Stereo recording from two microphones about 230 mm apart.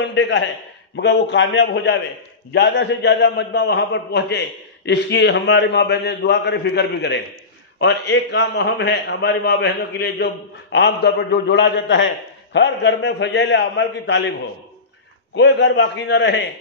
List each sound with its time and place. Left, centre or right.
0.0 s a man's voice: left
15.3 s a man's voice: left